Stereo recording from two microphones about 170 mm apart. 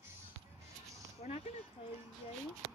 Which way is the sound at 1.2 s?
45° left (ahead or behind).